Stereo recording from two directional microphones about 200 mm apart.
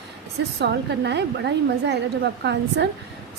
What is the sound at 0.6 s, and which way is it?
A woman's voice, 55° right (ahead or behind).